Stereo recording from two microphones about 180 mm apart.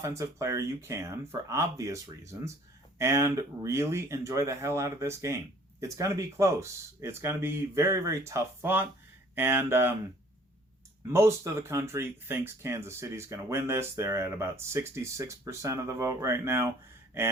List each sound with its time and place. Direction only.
0.0 s speech: 15° right (ahead or behind)
11.1 s speech: 15° right (ahead or behind)